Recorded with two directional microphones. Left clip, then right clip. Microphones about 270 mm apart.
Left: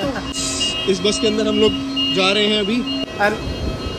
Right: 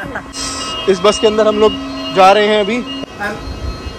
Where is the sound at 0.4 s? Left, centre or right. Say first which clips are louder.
Even; left.